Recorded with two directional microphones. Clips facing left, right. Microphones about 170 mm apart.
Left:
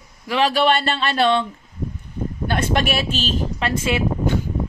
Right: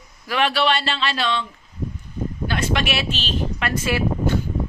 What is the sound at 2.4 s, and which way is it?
Speech, 50° left (ahead or behind).